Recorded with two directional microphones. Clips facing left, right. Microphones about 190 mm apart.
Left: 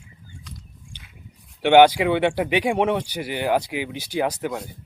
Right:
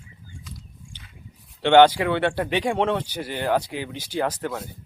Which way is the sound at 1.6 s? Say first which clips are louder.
Left 1 dB; 10° left (ahead or behind).